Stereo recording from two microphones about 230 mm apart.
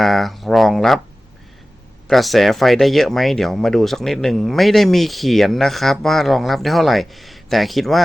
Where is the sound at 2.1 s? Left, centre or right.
Centre.